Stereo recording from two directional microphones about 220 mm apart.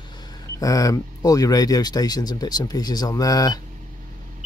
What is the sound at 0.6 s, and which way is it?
Speech, 15° left (ahead or behind).